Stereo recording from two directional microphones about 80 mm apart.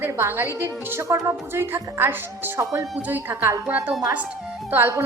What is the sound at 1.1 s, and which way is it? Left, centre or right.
A woman's voice, right.